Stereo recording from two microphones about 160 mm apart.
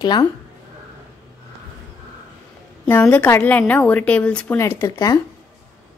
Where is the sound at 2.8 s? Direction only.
10° left (ahead or behind).